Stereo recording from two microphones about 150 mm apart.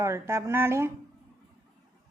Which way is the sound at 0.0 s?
20° right (ahead or behind).